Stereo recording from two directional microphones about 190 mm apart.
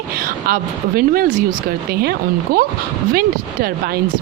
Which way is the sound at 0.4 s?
50° right (ahead or behind).